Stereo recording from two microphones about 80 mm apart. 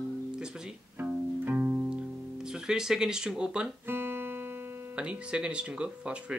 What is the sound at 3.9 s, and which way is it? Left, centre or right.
Music, right.